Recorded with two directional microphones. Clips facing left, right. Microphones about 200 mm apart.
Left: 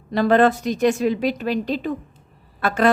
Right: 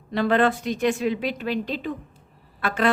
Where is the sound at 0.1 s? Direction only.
40° left (ahead or behind).